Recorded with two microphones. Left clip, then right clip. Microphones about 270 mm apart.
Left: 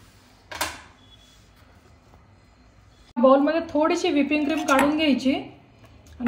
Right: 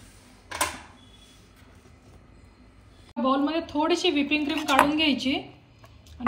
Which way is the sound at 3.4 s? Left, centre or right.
Centre.